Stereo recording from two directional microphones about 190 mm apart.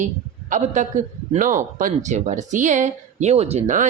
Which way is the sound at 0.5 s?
40° right (ahead or behind).